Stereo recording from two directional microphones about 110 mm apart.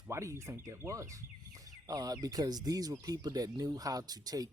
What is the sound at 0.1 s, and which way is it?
Speech, 25° right (ahead or behind).